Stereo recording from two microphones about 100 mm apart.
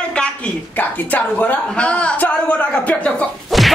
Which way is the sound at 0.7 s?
15° left (ahead or behind).